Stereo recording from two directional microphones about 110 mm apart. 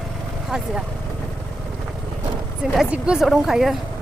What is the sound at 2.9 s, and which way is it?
Speech, 10° right (ahead or behind).